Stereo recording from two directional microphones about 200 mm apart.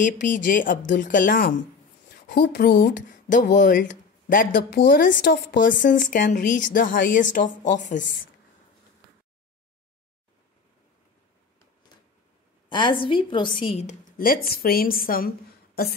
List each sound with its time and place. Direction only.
0.0 s a woman's voice: 40° left (ahead or behind)
12.6 s a woman's voice: 25° left (ahead or behind); by 15.9 s 50° left (ahead or behind)